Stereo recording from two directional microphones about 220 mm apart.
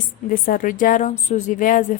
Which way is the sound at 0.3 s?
40° left (ahead or behind).